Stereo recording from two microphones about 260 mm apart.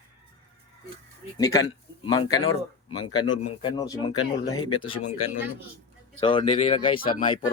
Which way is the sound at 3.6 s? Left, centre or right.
Centre.